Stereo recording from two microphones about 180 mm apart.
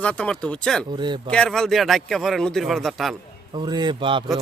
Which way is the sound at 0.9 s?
25° right (ahead or behind).